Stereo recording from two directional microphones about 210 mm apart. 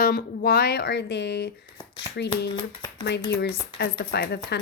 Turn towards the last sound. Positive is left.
turn(degrees=50)  # may be behind; listen again after turning